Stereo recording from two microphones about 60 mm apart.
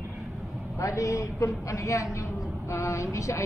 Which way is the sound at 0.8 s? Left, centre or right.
Left.